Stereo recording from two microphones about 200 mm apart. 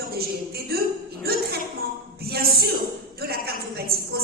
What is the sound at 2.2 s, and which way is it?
A woman's voice, 50° right (ahead or behind).